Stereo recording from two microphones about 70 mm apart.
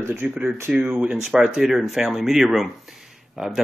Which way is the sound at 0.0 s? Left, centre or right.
Right.